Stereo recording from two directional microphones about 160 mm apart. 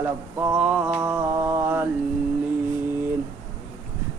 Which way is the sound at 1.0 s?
15° right (ahead or behind).